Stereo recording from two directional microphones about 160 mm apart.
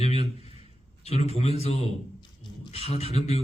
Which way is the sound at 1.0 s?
40° left (ahead or behind).